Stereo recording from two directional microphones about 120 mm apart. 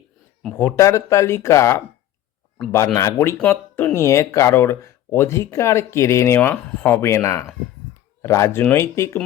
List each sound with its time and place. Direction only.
0.8 s speech: 25° left (ahead or behind)